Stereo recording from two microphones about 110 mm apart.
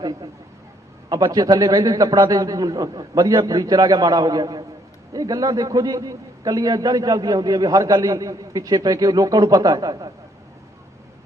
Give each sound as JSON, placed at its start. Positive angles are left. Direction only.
{"t": 0.0, "sound": "a man's voice", "side_deg": -35}